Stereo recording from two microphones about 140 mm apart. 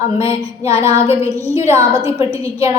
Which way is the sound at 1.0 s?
45° left (ahead or behind).